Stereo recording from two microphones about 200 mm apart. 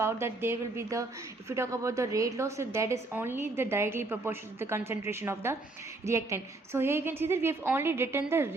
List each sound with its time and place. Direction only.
0.0 s a woman's voice: 10° right (ahead or behind)